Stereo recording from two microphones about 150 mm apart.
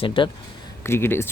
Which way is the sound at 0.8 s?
15° left (ahead or behind).